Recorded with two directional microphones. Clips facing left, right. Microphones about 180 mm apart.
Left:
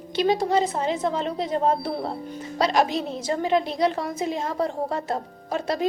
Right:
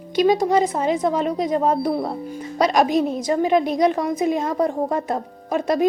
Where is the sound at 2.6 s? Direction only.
15° right (ahead or behind).